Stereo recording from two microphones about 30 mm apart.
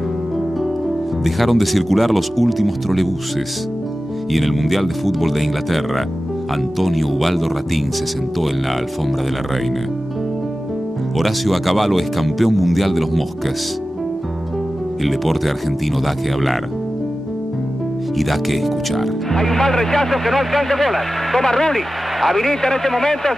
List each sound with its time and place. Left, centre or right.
1.2 s speech: centre
4.3 s speech: centre
11.1 s speech: centre
15.0 s speech: centre
18.1 s speech: centre
19.3 s a man's voice: centre
21.4 s a man's voice: centre
21.7 s a man's voice: centre